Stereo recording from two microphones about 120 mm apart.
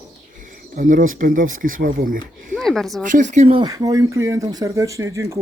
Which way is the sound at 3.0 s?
90° right.